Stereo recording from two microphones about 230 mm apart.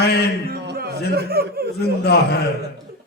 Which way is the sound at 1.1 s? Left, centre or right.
Right.